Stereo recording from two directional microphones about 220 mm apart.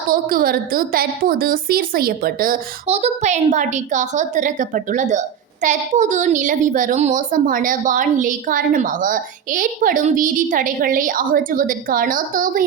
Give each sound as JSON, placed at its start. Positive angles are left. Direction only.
{"t": 0.1, "sound": "a woman's voice", "side_deg": -40}
{"t": 2.8, "sound": "a woman's voice", "side_deg": -30}